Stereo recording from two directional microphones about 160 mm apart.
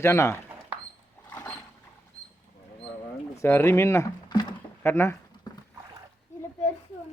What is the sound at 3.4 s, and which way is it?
Speech, 15° left (ahead or behind).